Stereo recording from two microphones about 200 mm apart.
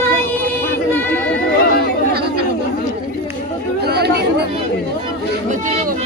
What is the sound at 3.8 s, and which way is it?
Chatter, 55° right (ahead or behind).